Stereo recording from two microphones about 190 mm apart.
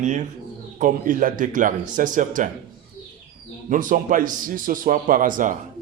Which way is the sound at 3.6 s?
45° right (ahead or behind).